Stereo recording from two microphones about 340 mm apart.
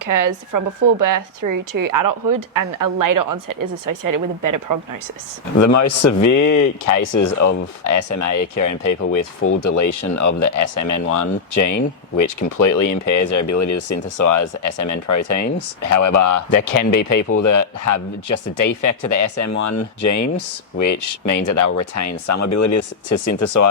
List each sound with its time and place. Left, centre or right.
0.0 s speech: right
5.5 s a man's voice: left
7.4 s speech: left
7.9 s speech: left